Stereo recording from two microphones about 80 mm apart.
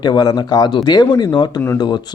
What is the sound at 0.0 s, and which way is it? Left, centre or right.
Speech, left.